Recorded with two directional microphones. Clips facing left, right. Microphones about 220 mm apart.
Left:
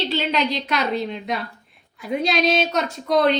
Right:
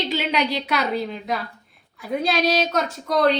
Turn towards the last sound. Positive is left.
turn(degrees=0)  # may be behind; listen again after turning